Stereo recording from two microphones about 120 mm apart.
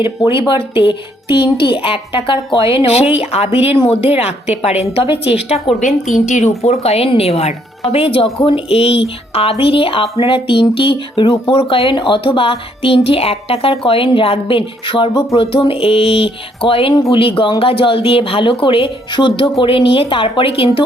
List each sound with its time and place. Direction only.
0.3 s a woman's voice: 45° left (ahead or behind)
5.8 s a woman's voice: 90° left
6.6 s a woman's voice: 60° left (ahead or behind)